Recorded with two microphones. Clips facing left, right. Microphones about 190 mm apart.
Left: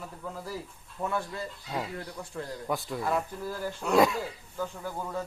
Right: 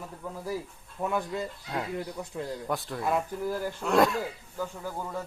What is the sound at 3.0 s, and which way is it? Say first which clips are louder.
Speech: right 2 dB; 15° right (ahead or behind).